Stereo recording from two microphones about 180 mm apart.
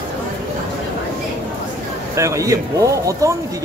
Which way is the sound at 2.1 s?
15° right (ahead or behind).